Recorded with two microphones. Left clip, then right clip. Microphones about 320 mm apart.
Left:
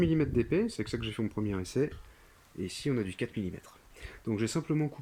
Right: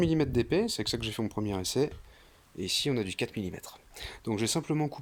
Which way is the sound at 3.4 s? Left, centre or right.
Right.